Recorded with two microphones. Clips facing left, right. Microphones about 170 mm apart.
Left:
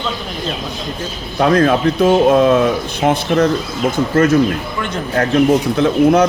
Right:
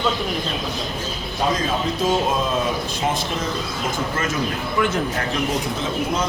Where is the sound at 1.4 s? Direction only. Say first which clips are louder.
Left 10 dB; 65° left (ahead or behind).